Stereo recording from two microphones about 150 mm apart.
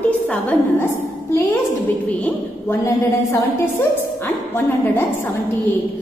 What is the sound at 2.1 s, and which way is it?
A woman's voice, 10° left (ahead or behind).